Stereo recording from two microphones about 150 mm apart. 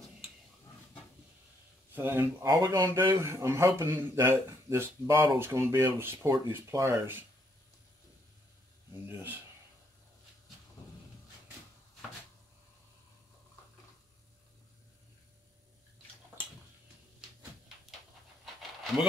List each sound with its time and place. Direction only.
2.0 s a man's voice: 15° right (ahead or behind)
9.1 s a man's voice: 15° right (ahead or behind)
18.4 s pant: centre (ahead or behind)